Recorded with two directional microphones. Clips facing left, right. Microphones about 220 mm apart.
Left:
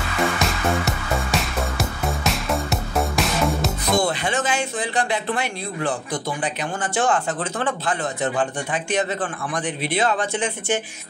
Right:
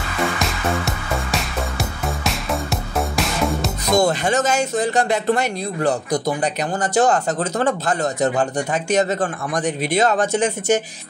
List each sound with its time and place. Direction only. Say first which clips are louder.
0.4 s music: even; centre (ahead or behind)
3.9 s speech: right 5 dB; 45° right (ahead or behind)